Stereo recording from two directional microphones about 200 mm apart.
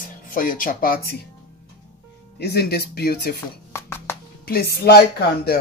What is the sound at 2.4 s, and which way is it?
Speech, 55° left (ahead or behind).